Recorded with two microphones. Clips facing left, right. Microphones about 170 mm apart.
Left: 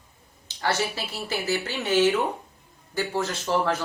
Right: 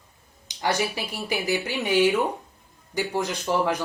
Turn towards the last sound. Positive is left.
turn(degrees=-15)  # may be behind; listen again after turning